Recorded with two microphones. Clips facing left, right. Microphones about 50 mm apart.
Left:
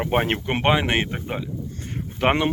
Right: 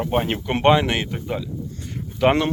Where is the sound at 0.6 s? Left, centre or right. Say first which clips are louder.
Right 5 dB; centre.